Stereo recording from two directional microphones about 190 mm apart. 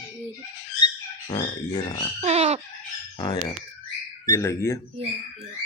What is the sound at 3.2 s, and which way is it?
Grunt, 20° left (ahead or behind).